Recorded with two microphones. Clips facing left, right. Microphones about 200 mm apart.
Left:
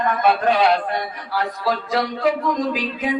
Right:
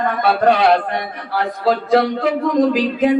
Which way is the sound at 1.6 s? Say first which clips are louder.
Right 9 dB; 60° right (ahead or behind).